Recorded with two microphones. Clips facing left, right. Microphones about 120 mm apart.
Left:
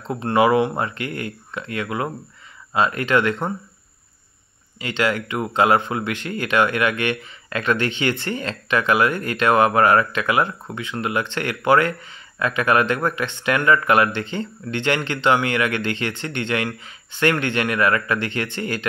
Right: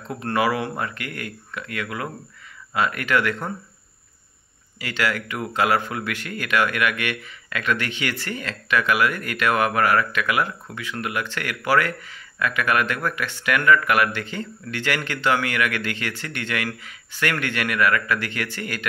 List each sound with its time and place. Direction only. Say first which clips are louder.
0.1 s speech: left 6 dB; 25° left (ahead or behind)
4.7 s speech: left 3 dB; 25° left (ahead or behind)